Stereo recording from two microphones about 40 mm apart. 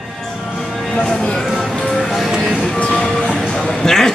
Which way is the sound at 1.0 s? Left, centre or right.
Centre.